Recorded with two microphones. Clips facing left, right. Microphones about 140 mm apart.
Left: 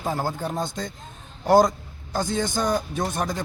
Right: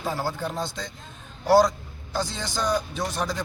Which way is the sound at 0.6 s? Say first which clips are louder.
Left 3 dB; 50° left (ahead or behind).